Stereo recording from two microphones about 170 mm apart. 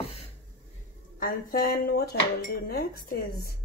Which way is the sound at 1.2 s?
60° left (ahead or behind).